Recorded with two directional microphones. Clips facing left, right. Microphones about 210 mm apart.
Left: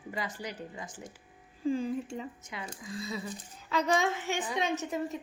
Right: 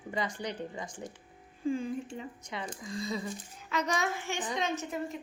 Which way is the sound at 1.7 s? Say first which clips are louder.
Left 3 dB; 35° left (ahead or behind).